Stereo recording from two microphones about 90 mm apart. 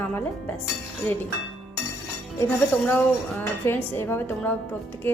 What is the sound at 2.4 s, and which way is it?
A woman's voice, 20° left (ahead or behind).